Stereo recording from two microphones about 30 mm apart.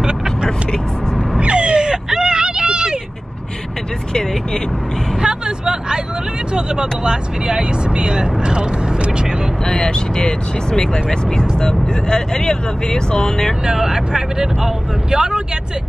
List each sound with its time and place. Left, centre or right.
0.0 s vehicle: right
1.4 s a sound: right
5.2 s a sound: right
6.5 s speech: right
9.7 s speech: left
13.7 s speech: centre